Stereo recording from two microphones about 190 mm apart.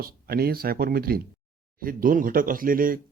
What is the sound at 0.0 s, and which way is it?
Speech, 55° right (ahead or behind).